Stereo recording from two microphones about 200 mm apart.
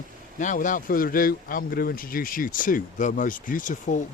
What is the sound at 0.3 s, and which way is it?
Speech, 40° left (ahead or behind).